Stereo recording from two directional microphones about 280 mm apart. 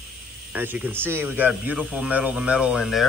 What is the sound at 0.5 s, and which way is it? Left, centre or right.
Speech, centre.